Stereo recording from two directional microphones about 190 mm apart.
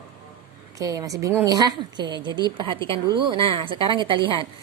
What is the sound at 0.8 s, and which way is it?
A woman's voice, 20° right (ahead or behind).